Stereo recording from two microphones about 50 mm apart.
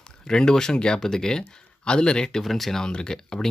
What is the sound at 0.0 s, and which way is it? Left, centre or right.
Speech, centre.